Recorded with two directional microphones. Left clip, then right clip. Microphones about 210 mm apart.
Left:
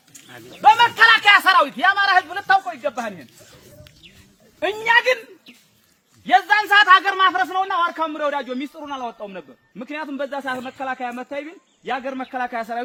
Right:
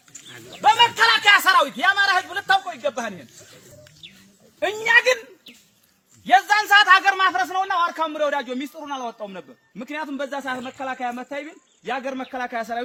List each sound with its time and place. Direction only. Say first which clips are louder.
0.6 s a man's voice: left 3 dB; 25° right (ahead or behind)
4.0 s bird: right 7 dB; 40° left (ahead or behind)
4.6 s a man's voice: even; 55° right (ahead or behind)
6.2 s a man's voice: left 1 dB; 60° right (ahead or behind)